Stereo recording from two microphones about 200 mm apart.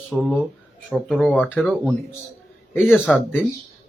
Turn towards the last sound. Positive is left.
turn(degrees=5)  # may be behind; listen again after turning